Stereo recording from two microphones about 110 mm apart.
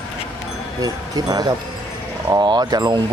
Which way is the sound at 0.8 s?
35° right (ahead or behind).